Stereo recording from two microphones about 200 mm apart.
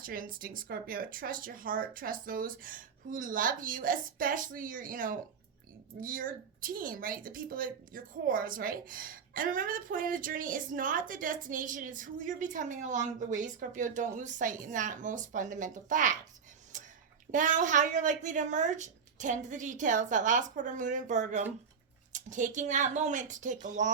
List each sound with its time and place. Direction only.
0.0 s a woman's voice: 45° right (ahead or behind)
16.7 s a sound: 40° right (ahead or behind)
17.3 s a woman's voice: 40° right (ahead or behind)